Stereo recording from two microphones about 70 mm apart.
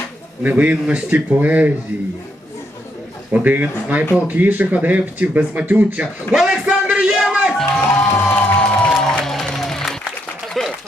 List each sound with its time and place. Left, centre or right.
0.4 s speech: right
3.3 s speech: right
6.3 s a sound: centre
7.8 s music: left
8.5 s music: centre
8.9 s music: centre
10.5 s a sound: centre